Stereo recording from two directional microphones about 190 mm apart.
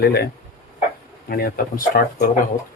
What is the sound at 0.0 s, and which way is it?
Speech, 55° left (ahead or behind).